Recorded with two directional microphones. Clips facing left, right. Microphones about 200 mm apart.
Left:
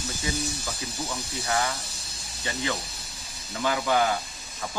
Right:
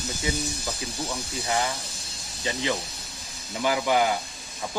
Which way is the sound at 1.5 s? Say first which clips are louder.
Even; 20° right (ahead or behind).